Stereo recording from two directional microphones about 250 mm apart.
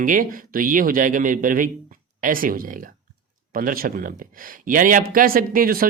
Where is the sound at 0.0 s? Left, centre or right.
Right.